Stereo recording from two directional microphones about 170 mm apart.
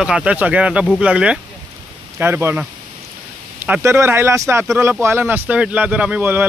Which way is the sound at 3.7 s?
15° right (ahead or behind).